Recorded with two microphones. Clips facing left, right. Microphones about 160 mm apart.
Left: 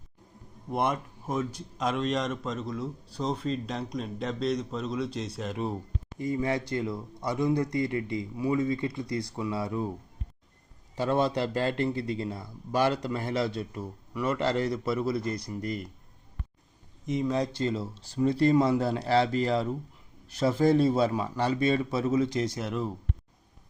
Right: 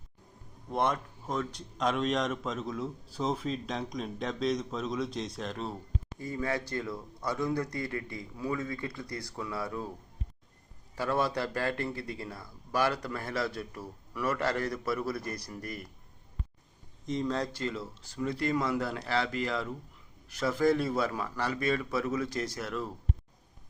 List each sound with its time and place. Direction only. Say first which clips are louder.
0.7 s a man's voice: left 1 dB; 10° left (ahead or behind)
5.6 s speech: left 4 dB; 20° left (ahead or behind)
10.9 s speech: left 4 dB; 25° left (ahead or behind)
17.1 s speech: left 4 dB; 10° left (ahead or behind)
17.6 s speech: left 5 dB; 30° left (ahead or behind)